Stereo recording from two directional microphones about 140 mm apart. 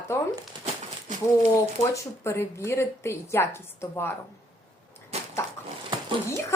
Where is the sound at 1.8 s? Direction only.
20° left (ahead or behind).